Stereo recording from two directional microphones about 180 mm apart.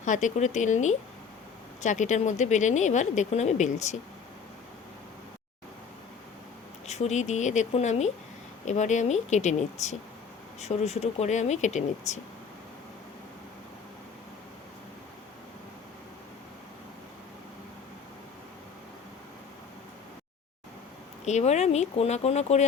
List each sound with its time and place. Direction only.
0.0 s speech: 45° left (ahead or behind)
6.8 s speech: 40° left (ahead or behind)
21.2 s speech: 40° left (ahead or behind)